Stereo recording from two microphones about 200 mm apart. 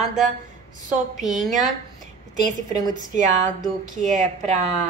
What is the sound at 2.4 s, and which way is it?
A woman's voice, 40° right (ahead or behind).